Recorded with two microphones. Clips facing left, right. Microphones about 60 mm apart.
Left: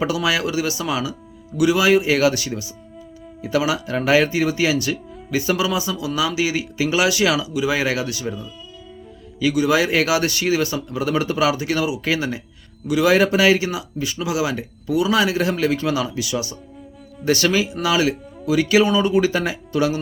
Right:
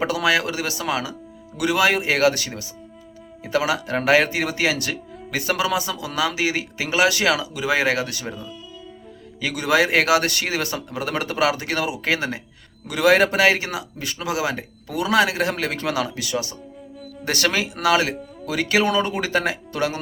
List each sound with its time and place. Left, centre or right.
0.0 s speech: right
17.2 s speech: right